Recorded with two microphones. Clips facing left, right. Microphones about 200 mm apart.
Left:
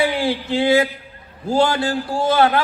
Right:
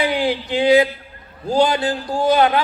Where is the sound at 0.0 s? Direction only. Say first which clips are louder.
Even; 20° right (ahead or behind).